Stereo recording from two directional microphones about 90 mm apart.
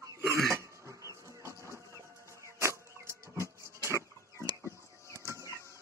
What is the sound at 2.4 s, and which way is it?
Wild animals, 30° right (ahead or behind).